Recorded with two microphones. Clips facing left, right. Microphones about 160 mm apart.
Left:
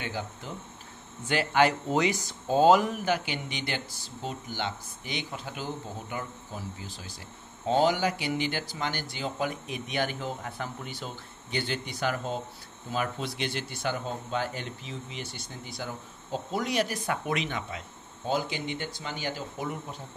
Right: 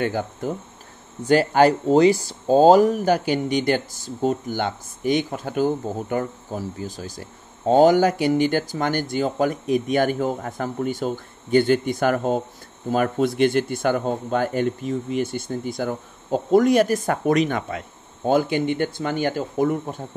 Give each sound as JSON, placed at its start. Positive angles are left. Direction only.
{"t": 0.0, "sound": "speech", "side_deg": -50}